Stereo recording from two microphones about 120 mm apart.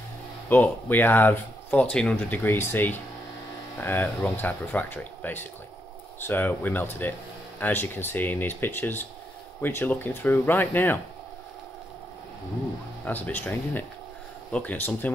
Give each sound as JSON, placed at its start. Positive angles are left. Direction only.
{"t": 0.5, "sound": "speech", "side_deg": 15}
{"t": 13.0, "sound": "speech", "side_deg": 15}